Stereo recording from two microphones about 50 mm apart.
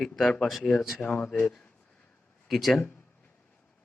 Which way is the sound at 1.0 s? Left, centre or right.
Left.